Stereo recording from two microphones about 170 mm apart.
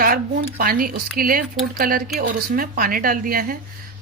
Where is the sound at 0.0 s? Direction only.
60° right (ahead or behind).